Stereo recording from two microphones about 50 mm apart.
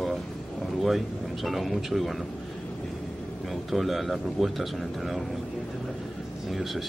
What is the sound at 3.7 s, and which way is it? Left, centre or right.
Speech, centre.